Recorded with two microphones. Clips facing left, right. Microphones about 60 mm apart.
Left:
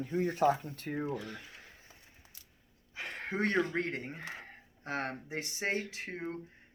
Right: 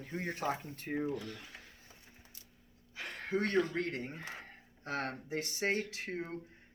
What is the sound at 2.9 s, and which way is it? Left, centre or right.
Speech, left.